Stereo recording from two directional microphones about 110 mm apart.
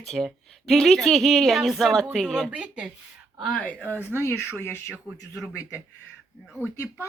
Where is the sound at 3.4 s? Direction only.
10° left (ahead or behind).